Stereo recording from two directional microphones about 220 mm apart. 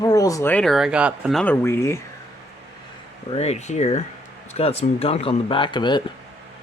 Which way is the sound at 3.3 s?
30° left (ahead or behind).